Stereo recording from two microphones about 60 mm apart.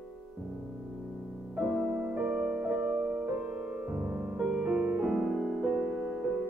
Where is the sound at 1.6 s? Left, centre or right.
Centre.